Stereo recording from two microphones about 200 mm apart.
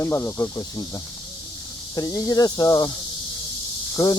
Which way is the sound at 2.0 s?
15° left (ahead or behind).